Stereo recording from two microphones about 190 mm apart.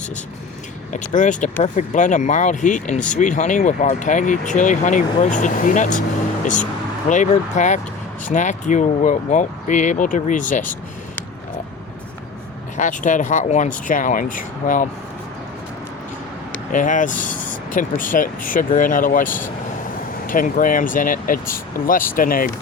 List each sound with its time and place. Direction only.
0.9 s speech: 40° left (ahead or behind)
12.7 s speech: 40° left (ahead or behind)
16.7 s speech: 45° left (ahead or behind)